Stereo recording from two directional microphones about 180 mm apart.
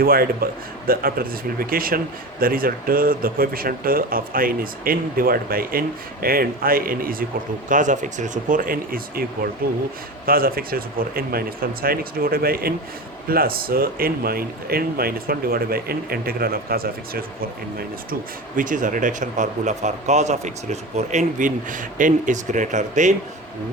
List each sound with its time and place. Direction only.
0.0 s speech: 55° right (ahead or behind)